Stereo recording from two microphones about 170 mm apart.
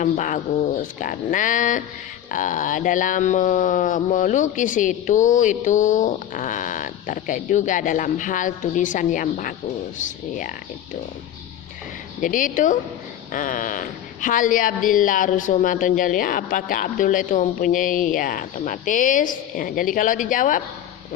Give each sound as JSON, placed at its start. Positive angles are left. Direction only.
{"t": 0.0, "sound": "speech", "side_deg": 45}
{"t": 12.2, "sound": "speech", "side_deg": 50}